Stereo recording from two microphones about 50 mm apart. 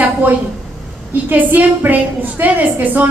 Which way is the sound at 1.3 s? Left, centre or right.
Right.